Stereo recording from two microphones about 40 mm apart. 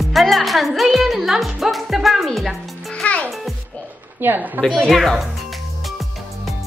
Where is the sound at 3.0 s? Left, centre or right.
Left.